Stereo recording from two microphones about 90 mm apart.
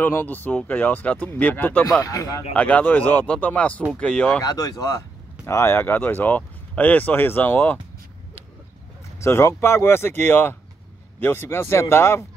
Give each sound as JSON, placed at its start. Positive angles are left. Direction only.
{"t": 0.0, "sound": "speech", "side_deg": 25}
{"t": 2.0, "sound": "speech", "side_deg": 40}
{"t": 2.5, "sound": "speech", "side_deg": 15}
{"t": 4.4, "sound": "speech", "side_deg": 45}
{"t": 5.4, "sound": "speech", "side_deg": 30}
{"t": 9.2, "sound": "speech", "side_deg": 30}